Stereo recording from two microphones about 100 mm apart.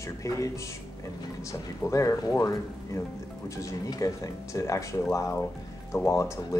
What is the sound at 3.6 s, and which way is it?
Speech, 35° left (ahead or behind).